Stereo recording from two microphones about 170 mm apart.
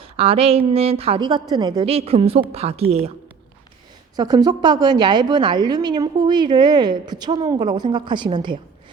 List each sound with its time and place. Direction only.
0.0 s a woman's voice: 35° right (ahead or behind)
4.2 s a woman's voice: 25° right (ahead or behind)